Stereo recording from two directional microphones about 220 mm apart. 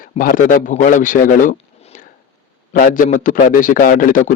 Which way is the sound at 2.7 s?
40° left (ahead or behind).